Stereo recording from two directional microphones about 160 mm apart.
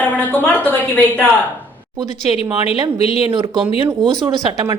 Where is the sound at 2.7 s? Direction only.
40° left (ahead or behind).